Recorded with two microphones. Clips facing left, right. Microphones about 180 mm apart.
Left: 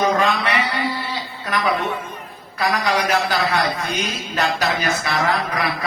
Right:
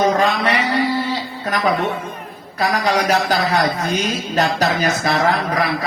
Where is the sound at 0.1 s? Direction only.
40° right (ahead or behind).